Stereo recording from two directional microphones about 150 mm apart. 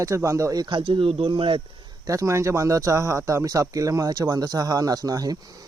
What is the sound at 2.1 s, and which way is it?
Speech, 20° right (ahead or behind).